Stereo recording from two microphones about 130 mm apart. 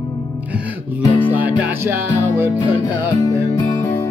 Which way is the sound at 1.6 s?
15° right (ahead or behind).